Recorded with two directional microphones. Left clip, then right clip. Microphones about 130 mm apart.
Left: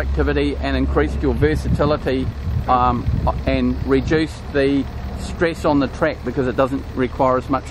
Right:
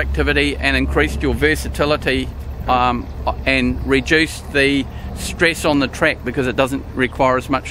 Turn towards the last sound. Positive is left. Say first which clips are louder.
# right 1 dB
turn(degrees=-25)  # may be behind; listen again after turning